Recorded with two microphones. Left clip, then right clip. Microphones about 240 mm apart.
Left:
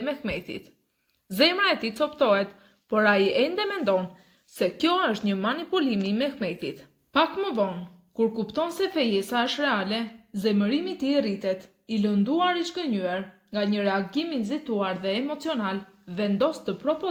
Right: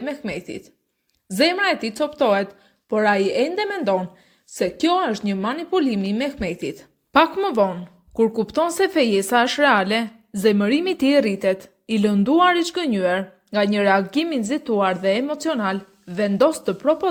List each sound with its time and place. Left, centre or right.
0.0 s speech: right